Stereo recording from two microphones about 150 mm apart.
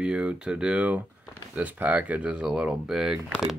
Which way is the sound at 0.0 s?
5° right (ahead or behind).